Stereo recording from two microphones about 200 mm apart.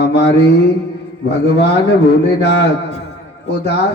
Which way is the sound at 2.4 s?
55° left (ahead or behind).